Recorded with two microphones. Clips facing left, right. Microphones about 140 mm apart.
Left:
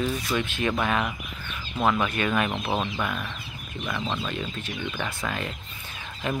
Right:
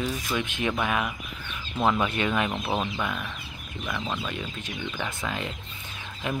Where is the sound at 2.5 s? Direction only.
5° left (ahead or behind).